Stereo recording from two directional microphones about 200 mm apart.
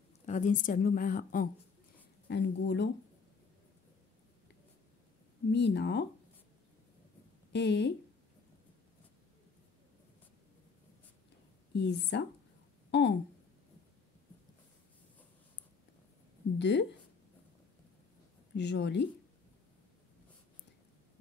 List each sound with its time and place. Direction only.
0.3 s a woman's voice: 40° left (ahead or behind)
2.2 s a woman's voice: 60° left (ahead or behind)
5.5 s a woman's voice: 60° left (ahead or behind)
7.5 s a woman's voice: 60° left (ahead or behind)
11.7 s a woman's voice: 60° left (ahead or behind)
16.5 s a woman's voice: 60° left (ahead or behind)
18.5 s a woman's voice: 60° left (ahead or behind)